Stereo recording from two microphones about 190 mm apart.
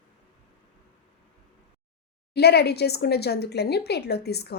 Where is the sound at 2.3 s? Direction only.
60° left (ahead or behind).